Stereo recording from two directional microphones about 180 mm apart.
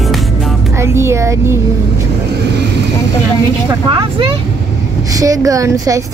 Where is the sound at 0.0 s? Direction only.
Centre (ahead or behind).